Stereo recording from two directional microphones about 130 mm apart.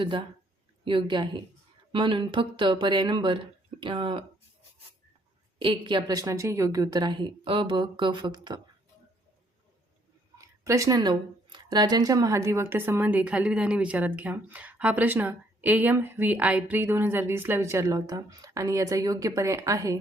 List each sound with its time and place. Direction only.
0.9 s a woman's voice: 40° right (ahead or behind)
5.5 s a woman's voice: 40° right (ahead or behind)
10.3 s a woman's voice: 25° right (ahead or behind)